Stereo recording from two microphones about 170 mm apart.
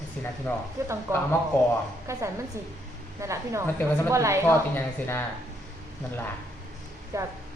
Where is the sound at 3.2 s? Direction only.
15° right (ahead or behind).